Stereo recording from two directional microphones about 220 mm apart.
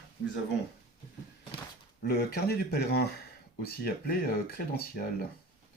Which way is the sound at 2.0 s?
45° left (ahead or behind).